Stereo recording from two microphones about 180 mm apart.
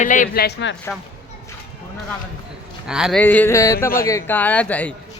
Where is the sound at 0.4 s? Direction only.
85° left.